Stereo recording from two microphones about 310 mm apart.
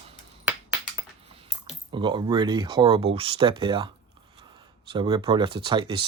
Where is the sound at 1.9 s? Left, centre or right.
Centre.